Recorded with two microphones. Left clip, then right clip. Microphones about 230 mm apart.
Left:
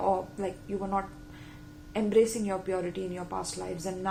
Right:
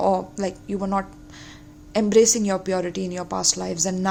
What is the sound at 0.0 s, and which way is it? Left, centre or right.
A woman's voice, right.